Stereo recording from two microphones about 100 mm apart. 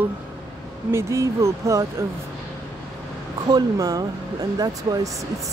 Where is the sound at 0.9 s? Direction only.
30° right (ahead or behind).